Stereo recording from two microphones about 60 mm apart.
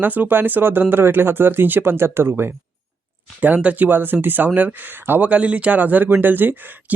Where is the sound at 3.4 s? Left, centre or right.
Right.